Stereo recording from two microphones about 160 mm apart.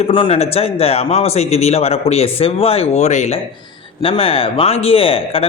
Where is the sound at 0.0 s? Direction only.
35° left (ahead or behind).